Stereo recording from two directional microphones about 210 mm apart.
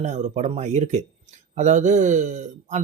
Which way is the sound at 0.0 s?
35° right (ahead or behind).